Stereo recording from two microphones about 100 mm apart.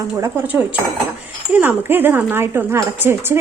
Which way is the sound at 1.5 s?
20° right (ahead or behind).